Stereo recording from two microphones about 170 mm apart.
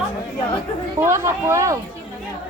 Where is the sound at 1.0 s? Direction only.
15° right (ahead or behind).